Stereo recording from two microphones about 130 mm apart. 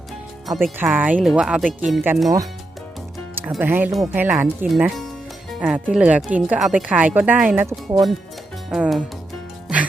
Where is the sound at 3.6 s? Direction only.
15° right (ahead or behind).